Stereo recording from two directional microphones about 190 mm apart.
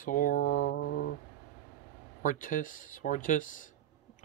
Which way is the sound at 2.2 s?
45° left (ahead or behind).